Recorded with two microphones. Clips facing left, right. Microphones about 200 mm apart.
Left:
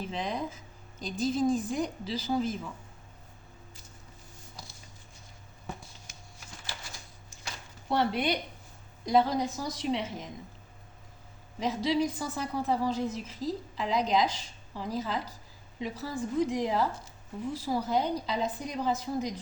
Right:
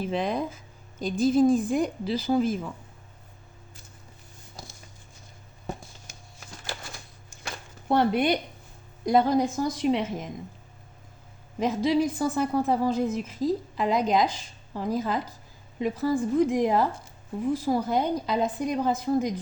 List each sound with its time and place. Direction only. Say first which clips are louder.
0.1 s a woman's voice: right 6 dB; 60° right (ahead or behind)
7.3 s a sound: right 5 dB; 55° right (ahead or behind)
9.0 s a woman's voice: right 4 dB; 50° right (ahead or behind)
11.6 s a woman's voice: right 5 dB; 50° right (ahead or behind)